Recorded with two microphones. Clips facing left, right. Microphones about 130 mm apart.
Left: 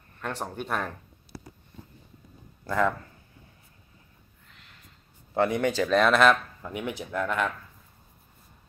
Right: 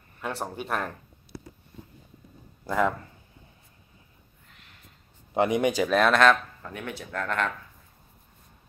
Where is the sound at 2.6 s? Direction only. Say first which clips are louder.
Even; 15° right (ahead or behind).